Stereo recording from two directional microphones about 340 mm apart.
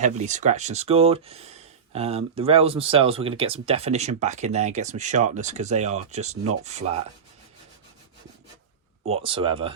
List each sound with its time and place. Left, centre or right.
0.0 s speech: right
9.0 s speech: centre